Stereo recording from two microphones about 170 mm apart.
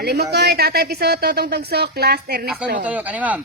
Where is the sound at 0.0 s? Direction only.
75° right (ahead or behind).